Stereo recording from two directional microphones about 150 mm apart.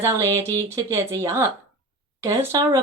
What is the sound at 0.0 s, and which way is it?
Speech, 20° right (ahead or behind).